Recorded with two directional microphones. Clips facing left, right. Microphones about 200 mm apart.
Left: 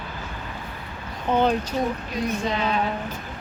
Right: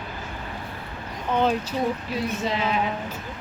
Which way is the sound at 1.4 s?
5° right (ahead or behind).